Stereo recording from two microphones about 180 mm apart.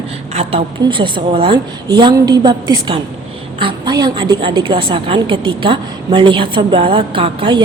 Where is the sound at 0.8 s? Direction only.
30° right (ahead or behind).